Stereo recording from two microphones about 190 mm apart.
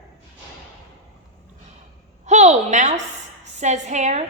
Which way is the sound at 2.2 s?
40° right (ahead or behind).